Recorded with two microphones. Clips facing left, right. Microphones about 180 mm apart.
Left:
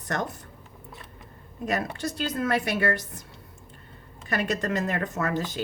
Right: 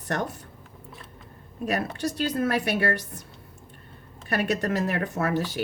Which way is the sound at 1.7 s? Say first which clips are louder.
Right 1 dB; 35° right (ahead or behind).